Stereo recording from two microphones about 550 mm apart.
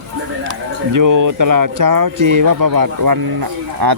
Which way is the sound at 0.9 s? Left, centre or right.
Right.